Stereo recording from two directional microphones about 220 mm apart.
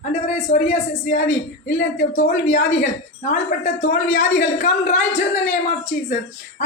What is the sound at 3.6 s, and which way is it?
Speech, 30° left (ahead or behind).